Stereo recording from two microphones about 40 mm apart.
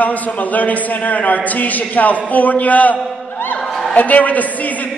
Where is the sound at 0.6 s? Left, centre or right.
Left.